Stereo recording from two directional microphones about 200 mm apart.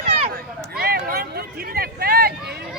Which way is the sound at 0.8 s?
50° right (ahead or behind).